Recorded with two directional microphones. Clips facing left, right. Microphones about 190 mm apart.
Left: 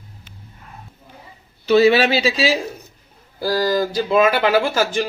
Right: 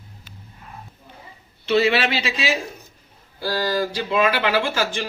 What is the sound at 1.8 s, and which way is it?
Speech, 35° left (ahead or behind).